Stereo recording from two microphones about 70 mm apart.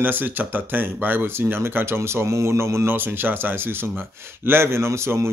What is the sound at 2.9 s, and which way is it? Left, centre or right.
A man's voice, right.